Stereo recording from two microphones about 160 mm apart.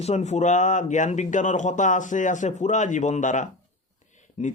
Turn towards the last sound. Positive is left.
turn(degrees=45)  # may be behind; listen again after turning